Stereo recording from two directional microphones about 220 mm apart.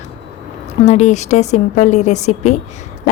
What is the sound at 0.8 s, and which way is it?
Speech, 30° left (ahead or behind).